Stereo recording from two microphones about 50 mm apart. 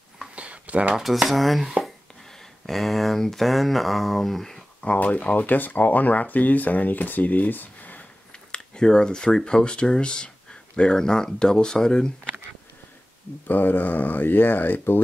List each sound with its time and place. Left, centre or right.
0.4 s a sound: right
0.9 s speech: centre
4.8 s speech: left
8.5 s speech: centre
13.5 s speech: left